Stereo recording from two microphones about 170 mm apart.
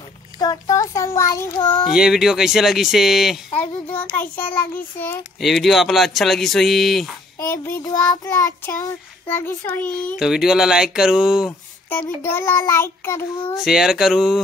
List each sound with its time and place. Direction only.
0.4 s a child's voice: 20° left (ahead or behind)
1.9 s speech: 5° right (ahead or behind)
3.9 s child singing: 10° left (ahead or behind)
5.4 s speech: centre (ahead or behind)
7.3 s child singing: 15° left (ahead or behind)
10.1 s speech: 5° right (ahead or behind)
11.9 s child singing: 10° left (ahead or behind)
13.6 s speech: 5° right (ahead or behind)